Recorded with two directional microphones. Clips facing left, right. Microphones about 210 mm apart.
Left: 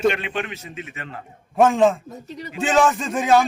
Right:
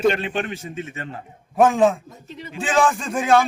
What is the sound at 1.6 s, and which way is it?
Speech, centre (ahead or behind).